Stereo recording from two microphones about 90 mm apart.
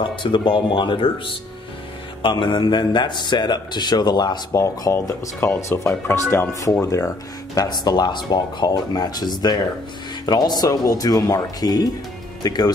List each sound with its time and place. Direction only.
0.0 s speech: 65° left (ahead or behind)
2.2 s speech: 65° left (ahead or behind)
4.9 s speech: 30° left (ahead or behind)
7.5 s speech: 45° left (ahead or behind)